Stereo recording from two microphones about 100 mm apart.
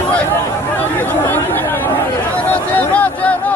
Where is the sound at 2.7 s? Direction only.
15° left (ahead or behind).